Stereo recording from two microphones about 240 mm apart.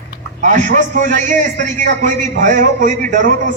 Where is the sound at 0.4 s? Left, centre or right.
Right.